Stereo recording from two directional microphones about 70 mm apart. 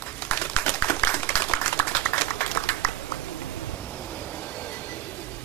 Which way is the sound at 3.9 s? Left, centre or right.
Left.